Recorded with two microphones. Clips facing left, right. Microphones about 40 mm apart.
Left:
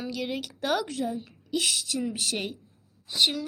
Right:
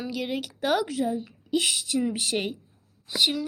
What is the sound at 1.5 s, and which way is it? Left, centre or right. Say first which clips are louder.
A woman's voice: right 2 dB; centre.